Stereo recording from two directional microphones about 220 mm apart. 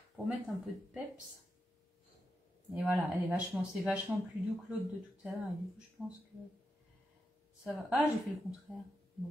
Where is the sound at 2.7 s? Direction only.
5° right (ahead or behind).